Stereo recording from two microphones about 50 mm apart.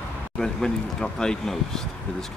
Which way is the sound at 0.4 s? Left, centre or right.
Centre.